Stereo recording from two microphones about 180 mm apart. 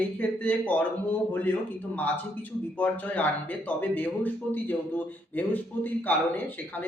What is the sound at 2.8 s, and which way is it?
Speech, 10° left (ahead or behind).